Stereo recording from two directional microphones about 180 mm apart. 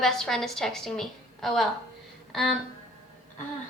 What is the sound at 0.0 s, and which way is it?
A woman's voice, centre (ahead or behind).